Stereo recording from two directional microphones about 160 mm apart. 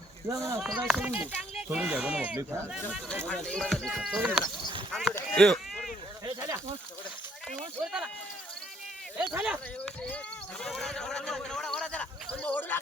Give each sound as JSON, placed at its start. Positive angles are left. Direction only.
{"t": 0.3, "sound": "speech", "side_deg": -20}
{"t": 0.6, "sound": "speech", "side_deg": -5}
{"t": 3.1, "sound": "speech", "side_deg": 5}
{"t": 5.3, "sound": "a sound", "side_deg": 5}
{"t": 6.2, "sound": "speech", "side_deg": -20}
{"t": 9.3, "sound": "speech", "side_deg": -5}
{"t": 9.8, "sound": "speech", "side_deg": 5}